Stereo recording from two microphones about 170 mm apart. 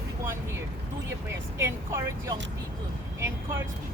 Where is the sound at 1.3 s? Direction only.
15° right (ahead or behind).